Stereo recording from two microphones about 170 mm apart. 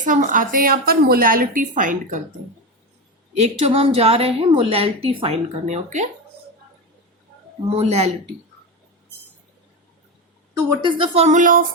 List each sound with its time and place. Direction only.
0.0 s a woman's voice: 50° right (ahead or behind)
3.3 s a woman's voice: 40° right (ahead or behind)
7.8 s a woman's voice: 40° right (ahead or behind)
10.7 s a woman's voice: 30° right (ahead or behind); by 11.6 s 50° right (ahead or behind)